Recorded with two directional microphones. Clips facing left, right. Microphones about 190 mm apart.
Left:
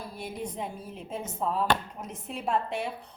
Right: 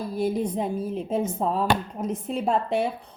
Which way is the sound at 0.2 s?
35° right (ahead or behind).